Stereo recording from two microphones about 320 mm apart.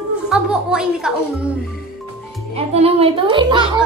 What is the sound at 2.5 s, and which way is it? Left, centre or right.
Speech, centre.